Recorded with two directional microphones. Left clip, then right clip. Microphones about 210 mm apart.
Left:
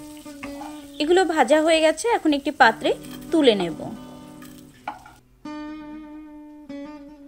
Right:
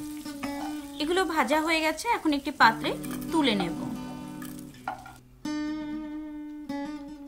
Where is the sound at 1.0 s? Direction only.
10° left (ahead or behind).